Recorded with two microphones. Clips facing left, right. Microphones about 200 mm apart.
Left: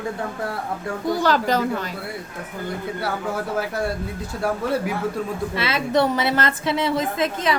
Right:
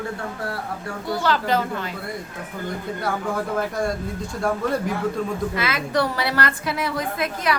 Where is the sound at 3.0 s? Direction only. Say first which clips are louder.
Right 2 dB; 5° left (ahead or behind).